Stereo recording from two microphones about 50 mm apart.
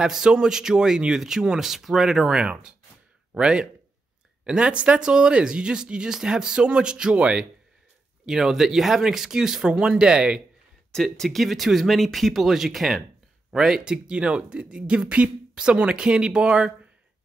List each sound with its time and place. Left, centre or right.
0.0 s speech: centre
8.3 s speech: centre
11.1 s speech: centre